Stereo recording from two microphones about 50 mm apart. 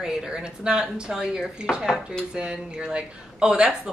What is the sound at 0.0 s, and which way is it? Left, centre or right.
Speech, centre.